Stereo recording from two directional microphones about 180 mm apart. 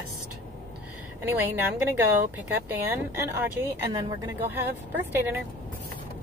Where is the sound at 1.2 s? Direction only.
10° right (ahead or behind).